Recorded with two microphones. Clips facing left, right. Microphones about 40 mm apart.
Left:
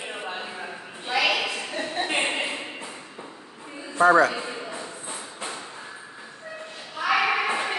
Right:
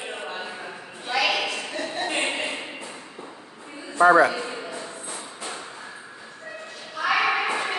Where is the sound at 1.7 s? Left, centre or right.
Centre.